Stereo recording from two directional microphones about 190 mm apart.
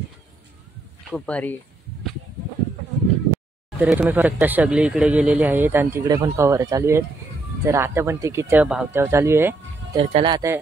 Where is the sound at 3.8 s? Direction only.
10° right (ahead or behind).